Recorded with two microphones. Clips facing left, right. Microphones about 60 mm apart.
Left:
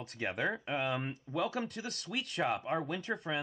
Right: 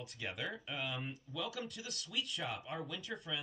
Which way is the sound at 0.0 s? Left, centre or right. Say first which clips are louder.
Left 8 dB; left.